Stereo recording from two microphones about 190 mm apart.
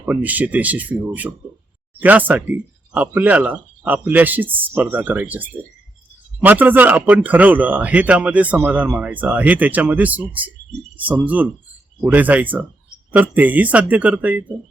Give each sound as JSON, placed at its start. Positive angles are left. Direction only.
{"t": 0.0, "sound": "speech", "side_deg": -10}